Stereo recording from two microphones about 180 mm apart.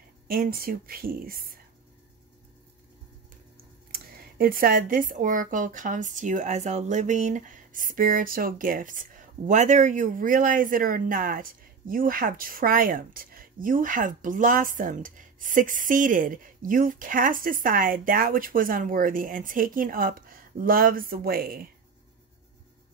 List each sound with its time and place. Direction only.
0.3 s speech: 50° right (ahead or behind)
3.9 s speech: 50° right (ahead or behind)